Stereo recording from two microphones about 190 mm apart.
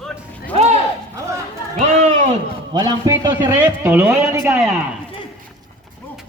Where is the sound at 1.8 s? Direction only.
40° right (ahead or behind).